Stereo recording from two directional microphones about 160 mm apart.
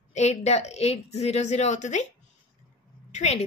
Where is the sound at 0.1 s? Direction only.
45° left (ahead or behind).